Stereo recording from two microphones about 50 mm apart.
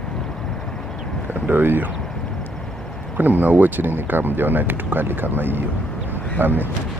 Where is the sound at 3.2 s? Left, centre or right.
Right.